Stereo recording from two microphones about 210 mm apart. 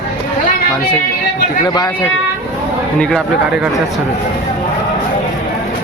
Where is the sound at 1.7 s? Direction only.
20° left (ahead or behind).